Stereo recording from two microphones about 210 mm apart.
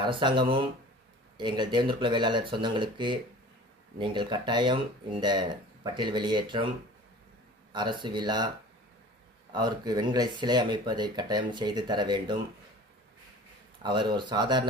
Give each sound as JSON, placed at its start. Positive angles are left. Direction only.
{"t": 0.0, "sound": "speech", "side_deg": -25}
{"t": 7.7, "sound": "speech", "side_deg": -20}
{"t": 9.5, "sound": "speech", "side_deg": -20}
{"t": 13.8, "sound": "speech", "side_deg": -20}